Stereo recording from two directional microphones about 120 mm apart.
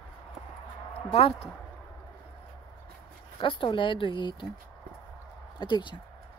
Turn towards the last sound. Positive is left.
turn(degrees=40)  # may be behind; listen again after turning